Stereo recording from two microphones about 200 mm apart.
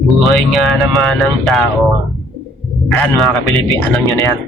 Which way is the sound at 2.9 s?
Centre (ahead or behind).